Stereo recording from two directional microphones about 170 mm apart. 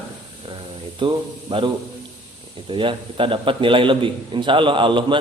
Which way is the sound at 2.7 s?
30° right (ahead or behind).